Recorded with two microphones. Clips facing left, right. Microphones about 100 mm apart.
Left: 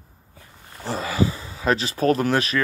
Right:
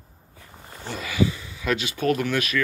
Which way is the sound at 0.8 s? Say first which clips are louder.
Left 2 dB; 35° left (ahead or behind).